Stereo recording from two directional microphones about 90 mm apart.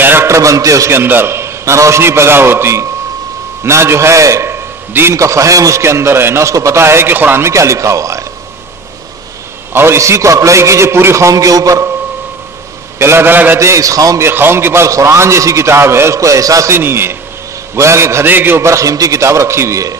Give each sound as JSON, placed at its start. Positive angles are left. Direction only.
{"t": 0.0, "sound": "a man's voice", "side_deg": -25}
{"t": 9.7, "sound": "a man's voice", "side_deg": -25}
{"t": 13.0, "sound": "a man's voice", "side_deg": -25}
{"t": 14.2, "sound": "a man's voice", "side_deg": -25}
{"t": 16.7, "sound": "a man's voice", "side_deg": -25}